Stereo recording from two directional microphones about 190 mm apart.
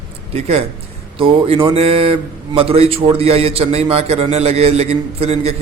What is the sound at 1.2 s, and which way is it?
Speech, 30° right (ahead or behind).